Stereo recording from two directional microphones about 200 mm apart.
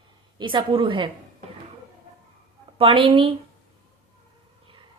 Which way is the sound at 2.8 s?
25° right (ahead or behind).